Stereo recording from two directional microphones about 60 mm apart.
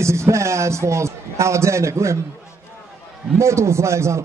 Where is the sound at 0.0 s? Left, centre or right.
Right.